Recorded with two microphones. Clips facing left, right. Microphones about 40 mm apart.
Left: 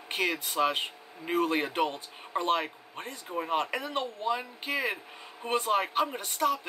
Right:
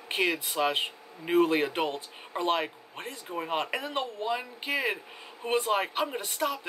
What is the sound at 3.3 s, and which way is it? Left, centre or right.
Speech, centre.